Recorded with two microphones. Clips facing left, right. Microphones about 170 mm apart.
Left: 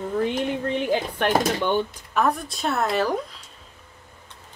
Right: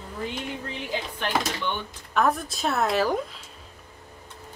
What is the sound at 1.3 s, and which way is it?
Speech, 50° left (ahead or behind).